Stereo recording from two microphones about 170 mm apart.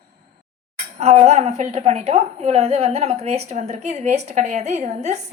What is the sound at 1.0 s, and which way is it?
A woman's voice, 40° right (ahead or behind).